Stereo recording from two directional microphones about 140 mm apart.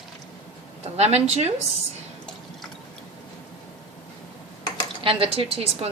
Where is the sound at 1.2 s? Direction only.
50° right (ahead or behind).